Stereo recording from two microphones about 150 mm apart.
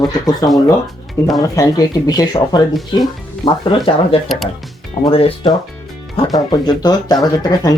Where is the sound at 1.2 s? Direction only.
20° left (ahead or behind).